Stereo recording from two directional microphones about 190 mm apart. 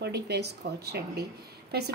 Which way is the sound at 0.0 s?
60° right (ahead or behind).